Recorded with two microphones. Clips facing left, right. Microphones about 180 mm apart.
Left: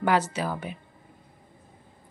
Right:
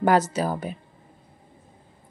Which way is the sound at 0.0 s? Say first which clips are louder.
Right 4 dB; 40° right (ahead or behind).